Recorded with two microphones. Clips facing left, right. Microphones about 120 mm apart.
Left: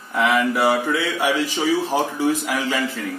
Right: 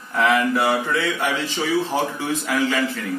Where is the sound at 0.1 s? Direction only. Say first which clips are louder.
Even; 15° left (ahead or behind).